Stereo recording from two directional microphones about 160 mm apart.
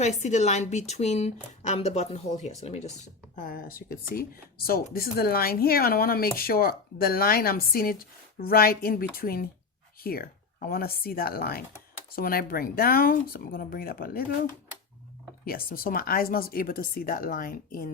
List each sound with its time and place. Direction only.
0.0 s speech: 45° left (ahead or behind); by 14.3 s 65° left (ahead or behind)
15.4 s speech: 65° left (ahead or behind)